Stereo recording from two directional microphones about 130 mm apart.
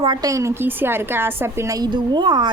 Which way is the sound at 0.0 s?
35° right (ahead or behind).